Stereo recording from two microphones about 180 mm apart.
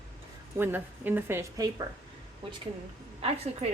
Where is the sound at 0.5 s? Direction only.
10° right (ahead or behind).